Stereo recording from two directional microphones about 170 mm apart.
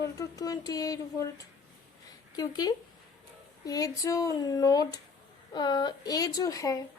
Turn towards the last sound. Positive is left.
turn(degrees=20)  # may be behind; listen again after turning